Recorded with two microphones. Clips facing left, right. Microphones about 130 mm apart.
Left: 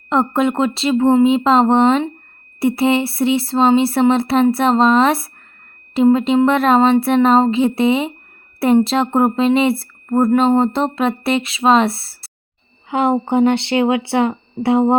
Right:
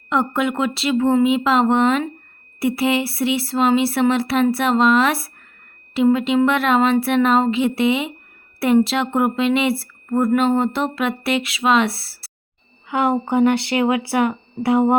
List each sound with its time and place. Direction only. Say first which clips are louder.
0.1 s a woman's voice: left 4 dB; 35° left (ahead or behind)
12.9 s speech: left 3 dB; 25° left (ahead or behind)